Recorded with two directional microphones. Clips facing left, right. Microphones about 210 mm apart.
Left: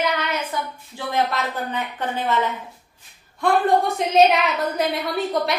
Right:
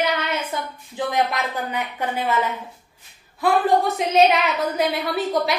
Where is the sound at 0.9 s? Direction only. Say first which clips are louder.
Right 1 dB; 15° right (ahead or behind).